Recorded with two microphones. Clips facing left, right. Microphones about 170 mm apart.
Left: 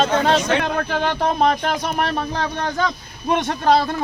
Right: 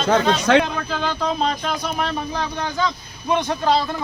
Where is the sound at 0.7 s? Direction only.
60° left (ahead or behind).